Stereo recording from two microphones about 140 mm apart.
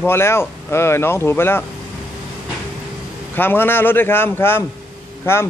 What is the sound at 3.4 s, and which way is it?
Speech, 15° left (ahead or behind).